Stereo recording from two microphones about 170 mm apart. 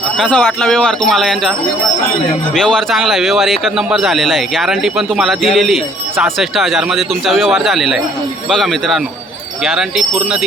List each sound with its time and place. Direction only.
0.2 s speech: 5° left (ahead or behind)
2.6 s speech: 5° left (ahead or behind)